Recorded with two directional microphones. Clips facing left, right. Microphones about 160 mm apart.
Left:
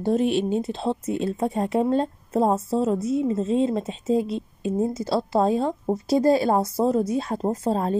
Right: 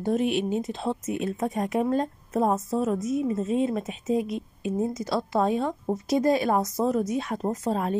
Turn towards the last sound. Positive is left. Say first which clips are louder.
# left 3 dB
turn(degrees=35)  # may be behind; listen again after turning